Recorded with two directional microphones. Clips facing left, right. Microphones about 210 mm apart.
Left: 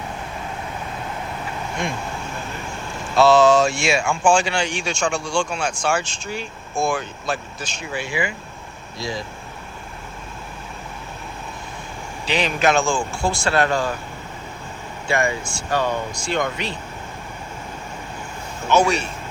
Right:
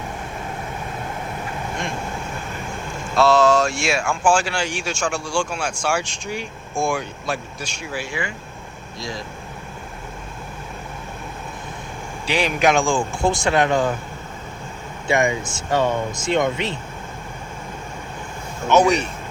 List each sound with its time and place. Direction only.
3.2 s speech: centre (ahead or behind)
7.9 s speech: centre (ahead or behind)
12.2 s speech: 10° right (ahead or behind)
15.0 s speech: 20° right (ahead or behind)
18.7 s speech: 15° right (ahead or behind)